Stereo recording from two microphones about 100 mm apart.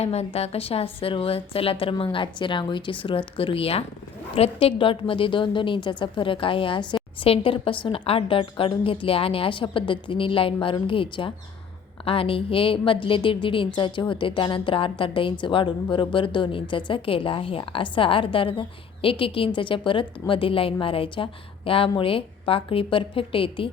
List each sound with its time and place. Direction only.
0.0 s a woman's voice: 90° left; by 23.6 s 65° left (ahead or behind)